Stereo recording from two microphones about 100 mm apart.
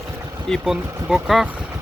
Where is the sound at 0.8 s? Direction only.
30° right (ahead or behind).